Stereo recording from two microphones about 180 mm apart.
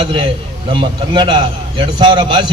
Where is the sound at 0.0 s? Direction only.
30° right (ahead or behind).